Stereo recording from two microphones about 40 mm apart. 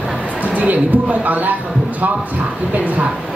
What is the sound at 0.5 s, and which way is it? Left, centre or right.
Speech, right.